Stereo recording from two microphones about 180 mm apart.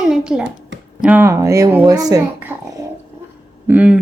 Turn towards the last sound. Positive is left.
turn(degrees=-5)  # may be behind; listen again after turning